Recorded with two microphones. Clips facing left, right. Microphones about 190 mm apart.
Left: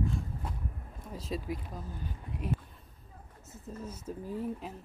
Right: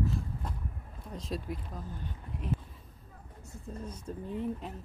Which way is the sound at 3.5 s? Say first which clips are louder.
Even; 5° left (ahead or behind).